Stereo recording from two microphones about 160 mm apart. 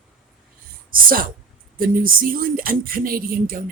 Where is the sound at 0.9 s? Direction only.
65° right (ahead or behind).